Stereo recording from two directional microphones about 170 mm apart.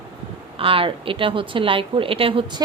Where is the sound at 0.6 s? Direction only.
30° right (ahead or behind).